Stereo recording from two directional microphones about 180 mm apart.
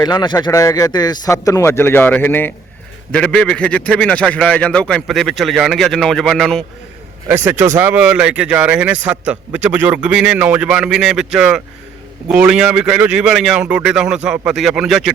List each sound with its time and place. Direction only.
0.0 s a man's voice: 25° left (ahead or behind); by 6.7 s centre (ahead or behind)
7.3 s a man's voice: 10° right (ahead or behind)